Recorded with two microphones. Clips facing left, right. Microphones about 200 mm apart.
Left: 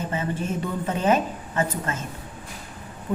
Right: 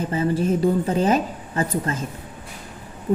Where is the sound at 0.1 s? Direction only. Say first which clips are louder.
Right 7 dB; 35° right (ahead or behind).